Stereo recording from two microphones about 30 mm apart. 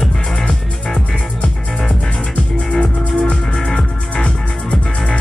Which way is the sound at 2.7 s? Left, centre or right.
Left.